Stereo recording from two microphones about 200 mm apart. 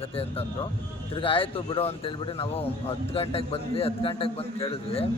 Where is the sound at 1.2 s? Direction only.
25° left (ahead or behind).